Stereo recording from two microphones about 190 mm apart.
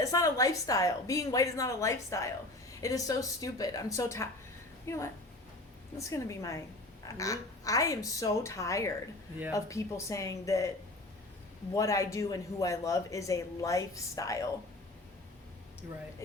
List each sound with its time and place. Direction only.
0.0 s speech: 20° left (ahead or behind)
11.7 s speech: 15° left (ahead or behind)